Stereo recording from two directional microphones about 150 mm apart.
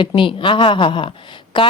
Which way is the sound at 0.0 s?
35° left (ahead or behind).